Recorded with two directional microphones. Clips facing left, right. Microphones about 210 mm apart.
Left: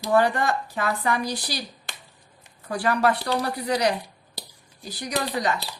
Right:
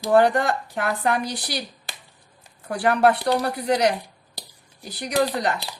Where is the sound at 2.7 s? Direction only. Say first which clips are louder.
Right 3 dB; 60° right (ahead or behind).